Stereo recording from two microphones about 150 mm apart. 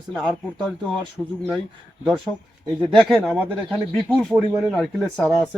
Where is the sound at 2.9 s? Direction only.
5° left (ahead or behind).